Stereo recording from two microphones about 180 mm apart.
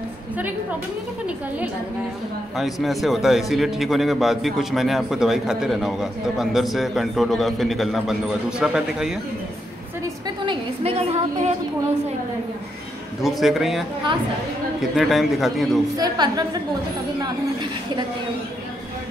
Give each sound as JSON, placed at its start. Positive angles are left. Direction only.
{"t": 2.5, "sound": "speech", "side_deg": 0}
{"t": 10.4, "sound": "a woman's voice", "side_deg": -30}
{"t": 13.2, "sound": "speech", "side_deg": 0}
{"t": 16.0, "sound": "a woman's voice", "side_deg": -25}